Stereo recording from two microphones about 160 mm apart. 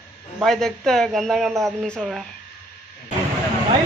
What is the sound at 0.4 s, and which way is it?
Speech, centre (ahead or behind).